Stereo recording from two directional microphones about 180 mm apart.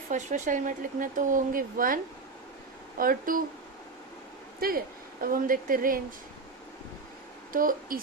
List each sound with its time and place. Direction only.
0.1 s speech: 40° right (ahead or behind)
3.0 s speech: 50° right (ahead or behind)
5.2 s speech: 50° right (ahead or behind)
7.5 s speech: 50° right (ahead or behind)